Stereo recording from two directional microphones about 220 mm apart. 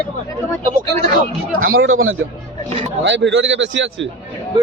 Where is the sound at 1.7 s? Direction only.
65° right (ahead or behind).